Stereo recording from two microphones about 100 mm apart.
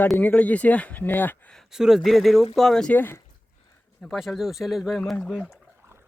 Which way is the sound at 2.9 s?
20° left (ahead or behind).